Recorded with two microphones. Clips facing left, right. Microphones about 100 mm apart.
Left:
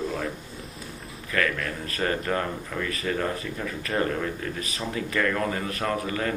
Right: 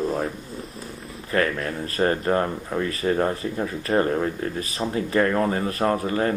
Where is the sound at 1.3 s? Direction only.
30° right (ahead or behind).